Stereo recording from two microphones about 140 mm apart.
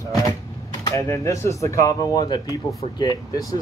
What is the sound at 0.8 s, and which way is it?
Speech, 20° left (ahead or behind).